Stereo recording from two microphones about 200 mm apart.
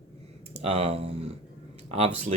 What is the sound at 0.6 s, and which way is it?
Speech, 30° right (ahead or behind).